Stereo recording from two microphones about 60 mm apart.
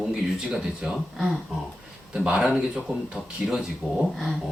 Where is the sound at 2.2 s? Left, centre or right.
Centre.